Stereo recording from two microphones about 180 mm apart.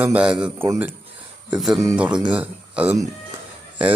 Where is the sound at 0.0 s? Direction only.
5° right (ahead or behind).